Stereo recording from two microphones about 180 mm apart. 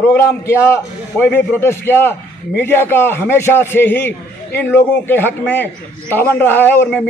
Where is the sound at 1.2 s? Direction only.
10° left (ahead or behind).